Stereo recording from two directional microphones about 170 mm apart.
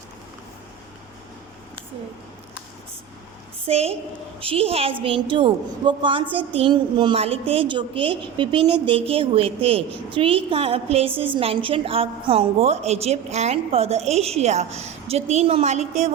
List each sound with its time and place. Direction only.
3.7 s a woman's voice: 40° right (ahead or behind)